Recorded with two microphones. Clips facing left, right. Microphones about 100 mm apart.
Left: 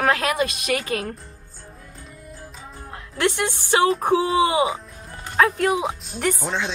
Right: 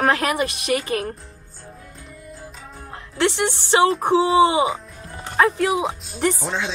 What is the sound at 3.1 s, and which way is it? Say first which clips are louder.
Speech: right 2 dB; 25° right (ahead or behind).